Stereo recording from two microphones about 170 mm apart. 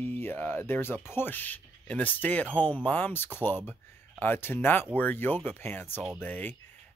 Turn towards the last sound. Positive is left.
turn(degrees=10)  # may be behind; listen again after turning